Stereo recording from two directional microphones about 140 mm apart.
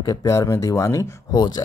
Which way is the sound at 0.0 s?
25° left (ahead or behind).